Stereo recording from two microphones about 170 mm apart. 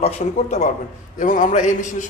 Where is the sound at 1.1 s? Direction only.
50° left (ahead or behind).